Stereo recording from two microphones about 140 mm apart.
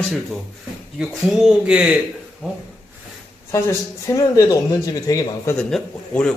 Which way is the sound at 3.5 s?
20° left (ahead or behind).